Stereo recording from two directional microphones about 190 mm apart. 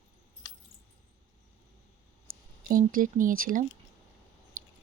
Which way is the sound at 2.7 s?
45° right (ahead or behind).